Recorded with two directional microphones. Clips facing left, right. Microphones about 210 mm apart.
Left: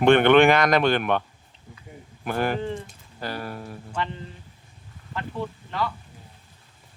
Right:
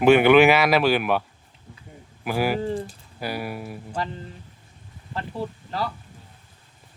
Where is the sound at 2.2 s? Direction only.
5° right (ahead or behind).